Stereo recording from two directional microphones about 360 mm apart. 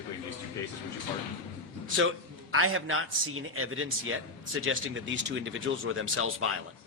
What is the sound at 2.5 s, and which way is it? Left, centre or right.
A man's voice, right.